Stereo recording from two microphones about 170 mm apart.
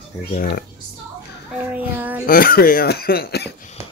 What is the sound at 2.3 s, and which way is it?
Speech, 60° left (ahead or behind).